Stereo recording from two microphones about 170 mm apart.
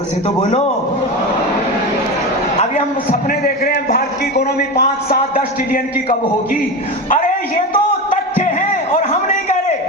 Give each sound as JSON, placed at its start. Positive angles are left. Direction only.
{"t": 2.6, "sound": "a man's voice", "side_deg": 55}